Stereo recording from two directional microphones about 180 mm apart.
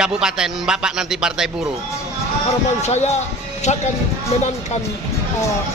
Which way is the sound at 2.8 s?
40° left (ahead or behind).